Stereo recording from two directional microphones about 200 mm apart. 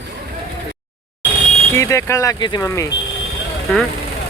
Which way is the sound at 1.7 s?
15° left (ahead or behind).